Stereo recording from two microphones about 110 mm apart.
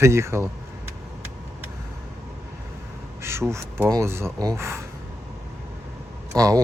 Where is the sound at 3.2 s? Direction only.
25° right (ahead or behind).